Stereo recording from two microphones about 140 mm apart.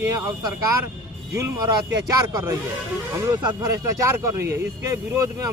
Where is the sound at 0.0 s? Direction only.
20° right (ahead or behind).